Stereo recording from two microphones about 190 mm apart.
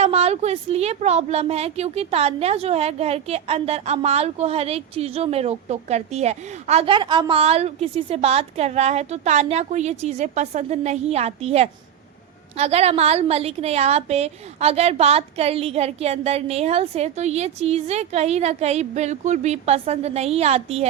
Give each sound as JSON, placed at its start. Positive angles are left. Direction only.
{"t": 0.0, "sound": "a woman's voice", "side_deg": -35}